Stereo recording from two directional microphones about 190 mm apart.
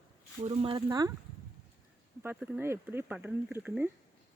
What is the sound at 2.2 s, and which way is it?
Speech, 10° right (ahead or behind).